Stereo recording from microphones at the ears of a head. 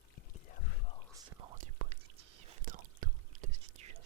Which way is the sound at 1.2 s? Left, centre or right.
Right.